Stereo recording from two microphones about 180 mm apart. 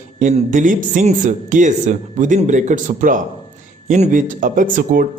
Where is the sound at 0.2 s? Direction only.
45° right (ahead or behind).